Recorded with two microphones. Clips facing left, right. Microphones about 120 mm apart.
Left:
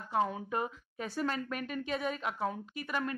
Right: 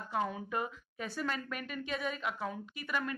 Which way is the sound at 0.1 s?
30° left (ahead or behind).